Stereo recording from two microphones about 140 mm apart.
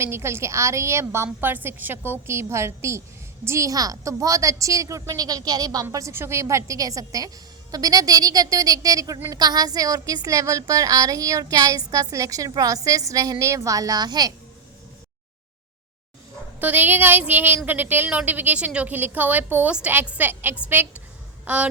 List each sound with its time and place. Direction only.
0.0 s a woman's voice: 20° right (ahead or behind)
16.6 s a woman's voice: 15° right (ahead or behind)